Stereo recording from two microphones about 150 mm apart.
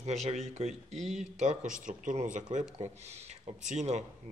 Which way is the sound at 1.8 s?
55° right (ahead or behind).